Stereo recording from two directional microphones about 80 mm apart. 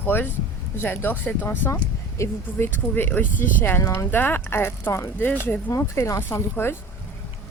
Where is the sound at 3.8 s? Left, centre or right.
Left.